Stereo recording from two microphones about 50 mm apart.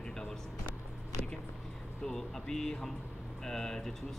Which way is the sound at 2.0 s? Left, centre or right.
Centre.